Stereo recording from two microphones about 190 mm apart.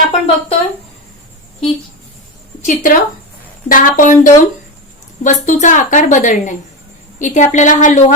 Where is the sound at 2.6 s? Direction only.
40° left (ahead or behind).